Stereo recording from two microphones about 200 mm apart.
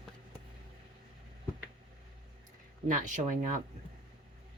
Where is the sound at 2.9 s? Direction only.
40° right (ahead or behind).